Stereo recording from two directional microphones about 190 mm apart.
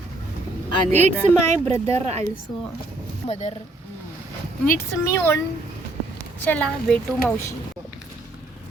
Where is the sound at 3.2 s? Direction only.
35° left (ahead or behind).